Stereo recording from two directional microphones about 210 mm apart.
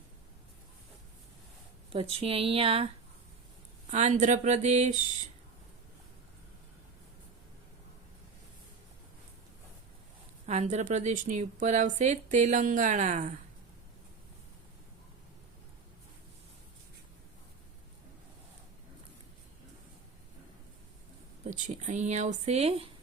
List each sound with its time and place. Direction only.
1.9 s speech: 25° right (ahead or behind)
3.9 s a woman's voice: 35° right (ahead or behind)
10.4 s a woman's voice: 30° right (ahead or behind)
21.4 s a woman's voice: 35° right (ahead or behind)